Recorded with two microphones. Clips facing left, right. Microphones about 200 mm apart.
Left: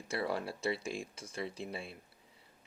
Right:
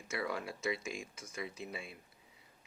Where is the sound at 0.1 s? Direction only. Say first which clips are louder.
Left 3 dB; 30° left (ahead or behind).